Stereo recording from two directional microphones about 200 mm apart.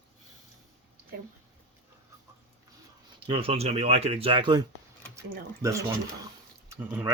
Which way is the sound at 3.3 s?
30° right (ahead or behind).